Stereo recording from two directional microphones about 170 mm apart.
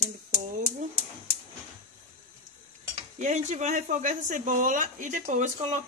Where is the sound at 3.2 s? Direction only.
45° right (ahead or behind).